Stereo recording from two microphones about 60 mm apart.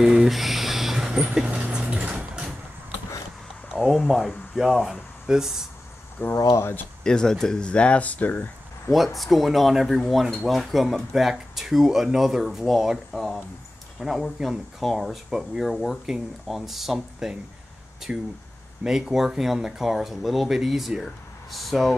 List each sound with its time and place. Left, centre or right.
0.0 s a sound: centre
3.7 s speech: centre
6.2 s speech: left
7.0 s speech: centre; by 8.5 s left
8.9 s speech: centre
18.1 s speech: centre